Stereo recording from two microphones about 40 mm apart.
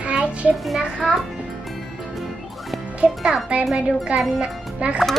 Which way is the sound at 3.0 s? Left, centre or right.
Right.